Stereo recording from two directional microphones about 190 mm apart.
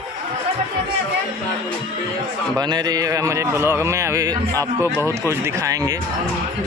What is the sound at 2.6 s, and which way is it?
A man's voice, 20° right (ahead or behind).